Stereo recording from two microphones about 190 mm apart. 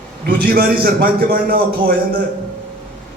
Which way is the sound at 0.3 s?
50° right (ahead or behind).